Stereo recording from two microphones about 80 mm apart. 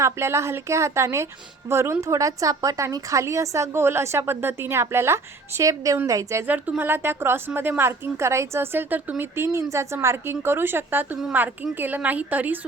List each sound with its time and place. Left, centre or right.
0.0 s a woman's voice: right
6.5 s a woman's voice: right